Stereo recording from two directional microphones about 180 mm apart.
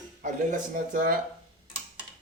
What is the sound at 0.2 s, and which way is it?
Speech, 45° right (ahead or behind).